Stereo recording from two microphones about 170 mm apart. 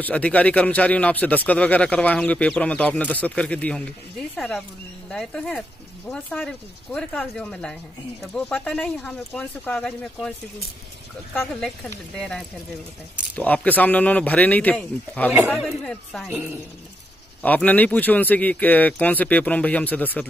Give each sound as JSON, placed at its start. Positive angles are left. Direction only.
{"t": 0.0, "sound": "speech", "side_deg": 10}
{"t": 12.2, "sound": "speech", "side_deg": 5}
{"t": 17.4, "sound": "speech", "side_deg": 10}